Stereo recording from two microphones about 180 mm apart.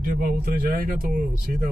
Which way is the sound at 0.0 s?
55° right (ahead or behind).